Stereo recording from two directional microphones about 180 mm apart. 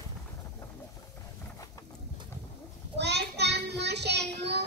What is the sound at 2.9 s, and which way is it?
Child singing, 70° right (ahead or behind).